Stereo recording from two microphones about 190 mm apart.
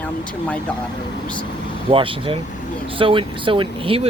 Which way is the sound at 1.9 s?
25° right (ahead or behind).